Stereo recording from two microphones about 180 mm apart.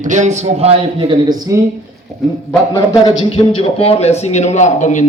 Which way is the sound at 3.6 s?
30° left (ahead or behind).